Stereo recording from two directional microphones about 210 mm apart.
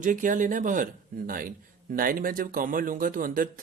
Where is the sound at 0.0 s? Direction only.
40° right (ahead or behind).